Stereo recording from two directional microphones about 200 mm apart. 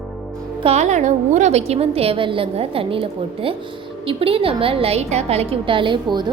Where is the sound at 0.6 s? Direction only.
35° right (ahead or behind).